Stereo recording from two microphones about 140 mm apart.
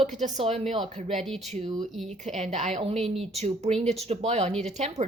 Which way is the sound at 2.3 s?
55° right (ahead or behind).